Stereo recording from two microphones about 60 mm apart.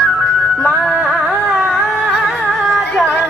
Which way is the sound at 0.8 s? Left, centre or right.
Centre.